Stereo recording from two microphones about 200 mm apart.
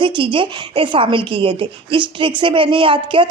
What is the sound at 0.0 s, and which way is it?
Speech, 25° right (ahead or behind).